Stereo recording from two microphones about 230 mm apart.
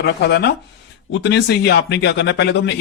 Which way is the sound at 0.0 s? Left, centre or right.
Left.